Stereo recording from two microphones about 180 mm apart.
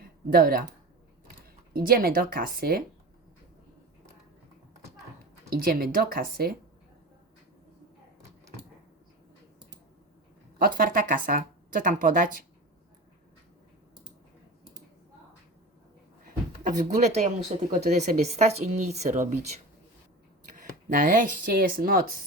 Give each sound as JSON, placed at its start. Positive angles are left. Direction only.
{"t": 0.0, "sound": "a sound", "side_deg": -55}
{"t": 1.7, "sound": "speech", "side_deg": -55}
{"t": 5.5, "sound": "speech", "side_deg": -55}
{"t": 10.6, "sound": "speech", "side_deg": -55}
{"t": 16.5, "sound": "a woman's voice", "side_deg": -40}
{"t": 20.9, "sound": "speech", "side_deg": -50}